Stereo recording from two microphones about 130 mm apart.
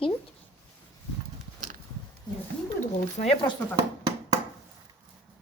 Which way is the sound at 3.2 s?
80° left.